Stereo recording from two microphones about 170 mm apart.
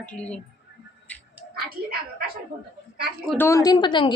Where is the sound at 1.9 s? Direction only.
60° right (ahead or behind).